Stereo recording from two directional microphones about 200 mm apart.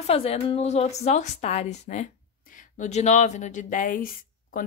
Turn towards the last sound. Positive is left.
turn(degrees=45)  # may be behind; listen again after turning